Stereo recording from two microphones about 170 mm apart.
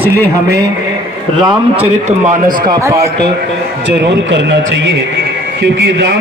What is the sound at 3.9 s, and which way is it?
A man's voice, 90° right.